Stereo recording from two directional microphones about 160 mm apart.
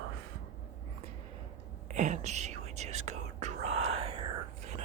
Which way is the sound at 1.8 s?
45° right (ahead or behind).